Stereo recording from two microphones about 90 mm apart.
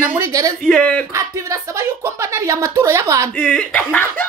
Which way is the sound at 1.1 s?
35° right (ahead or behind).